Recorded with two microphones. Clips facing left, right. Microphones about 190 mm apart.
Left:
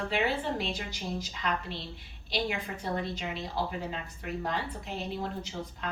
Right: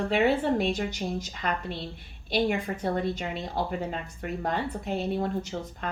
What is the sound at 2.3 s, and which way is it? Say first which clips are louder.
A woman's voice: right 7 dB; 50° right (ahead or behind).